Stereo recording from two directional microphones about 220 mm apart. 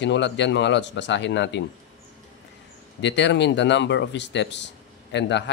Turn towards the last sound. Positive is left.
turn(degrees=50)  # may be behind; listen again after turning